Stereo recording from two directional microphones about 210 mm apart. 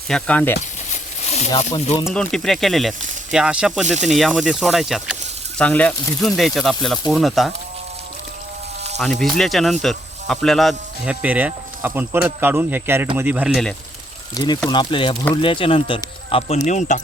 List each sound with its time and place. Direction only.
0.1 s speech: 5° left (ahead or behind)
1.3 s speech: 30° left (ahead or behind)
2.0 s speech: centre (ahead or behind)
9.2 s speech: centre (ahead or behind)
14.3 s speech: 20° left (ahead or behind)